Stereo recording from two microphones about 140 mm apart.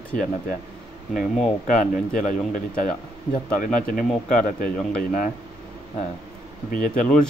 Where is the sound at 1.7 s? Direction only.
70° left (ahead or behind).